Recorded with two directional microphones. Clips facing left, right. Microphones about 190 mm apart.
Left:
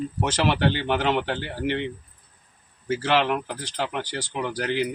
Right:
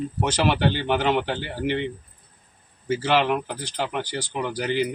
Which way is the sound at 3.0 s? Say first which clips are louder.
Right 1 dB; 5° right (ahead or behind).